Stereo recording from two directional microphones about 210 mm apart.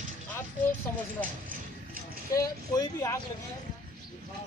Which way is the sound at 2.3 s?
15° left (ahead or behind).